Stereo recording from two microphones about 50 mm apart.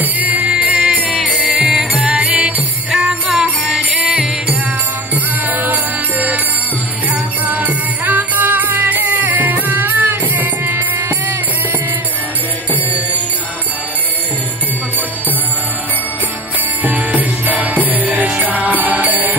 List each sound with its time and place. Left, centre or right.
0.0 s music: right
0.9 s music: centre
2.0 s music: right
2.4 s jingle bell: right
3.9 s music: centre
5.5 s music: right
6.1 s music: right
7.4 s music: right
16.8 s music: right